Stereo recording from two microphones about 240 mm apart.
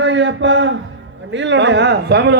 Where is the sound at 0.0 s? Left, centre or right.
Right.